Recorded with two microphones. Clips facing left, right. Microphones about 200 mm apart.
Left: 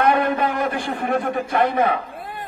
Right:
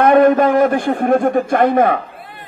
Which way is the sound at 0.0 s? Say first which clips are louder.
Right 8 dB; 45° right (ahead or behind).